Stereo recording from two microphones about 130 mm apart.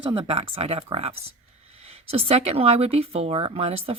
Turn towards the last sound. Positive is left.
turn(degrees=-50)  # may be behind; listen again after turning